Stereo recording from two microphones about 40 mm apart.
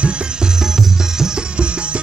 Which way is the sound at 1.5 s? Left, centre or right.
Right.